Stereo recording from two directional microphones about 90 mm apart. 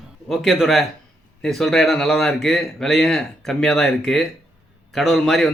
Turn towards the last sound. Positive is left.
turn(degrees=0)  # may be behind; listen again after turning